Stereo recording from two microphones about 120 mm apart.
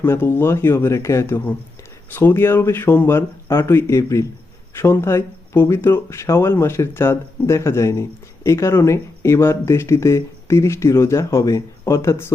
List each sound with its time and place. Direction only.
0.0 s speech: 20° left (ahead or behind)